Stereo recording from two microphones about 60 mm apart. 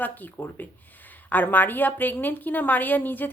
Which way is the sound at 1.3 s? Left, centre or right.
Left.